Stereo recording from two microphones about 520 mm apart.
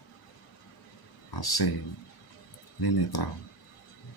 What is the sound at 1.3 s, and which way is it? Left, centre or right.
Speech, left.